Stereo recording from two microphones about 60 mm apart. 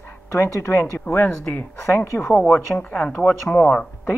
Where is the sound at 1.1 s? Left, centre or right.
Left.